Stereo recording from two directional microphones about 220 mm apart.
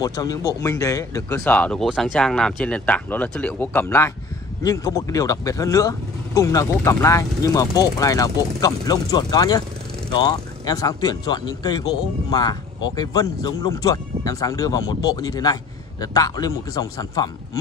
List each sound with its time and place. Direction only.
0.0 s speech: 15° left (ahead or behind)